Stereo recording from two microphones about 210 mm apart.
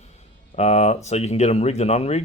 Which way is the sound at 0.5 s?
35° left (ahead or behind).